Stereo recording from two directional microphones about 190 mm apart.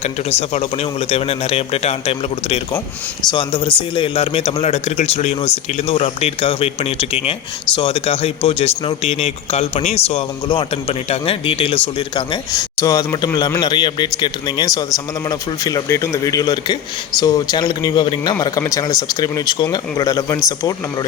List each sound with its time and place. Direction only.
0.0 s a man's voice: 35° left (ahead or behind); by 20.7 s 20° left (ahead or behind)